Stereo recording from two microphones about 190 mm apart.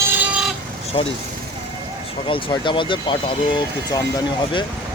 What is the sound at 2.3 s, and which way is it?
Speech, 25° left (ahead or behind).